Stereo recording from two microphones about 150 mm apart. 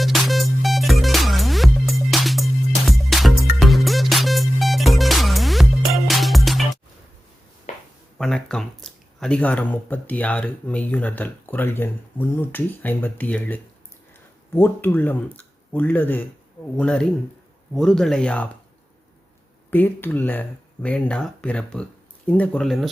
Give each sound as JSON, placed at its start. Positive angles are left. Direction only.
{"t": 0.0, "sound": "music", "side_deg": 0}
{"t": 7.7, "sound": "a sound", "side_deg": 55}
{"t": 8.2, "sound": "speech", "side_deg": 5}
{"t": 19.7, "sound": "speech", "side_deg": 10}